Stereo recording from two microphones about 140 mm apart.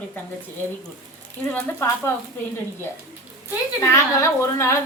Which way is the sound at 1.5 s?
20° left (ahead or behind).